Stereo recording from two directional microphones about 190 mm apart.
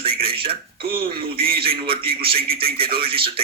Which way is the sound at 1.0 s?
50° right (ahead or behind).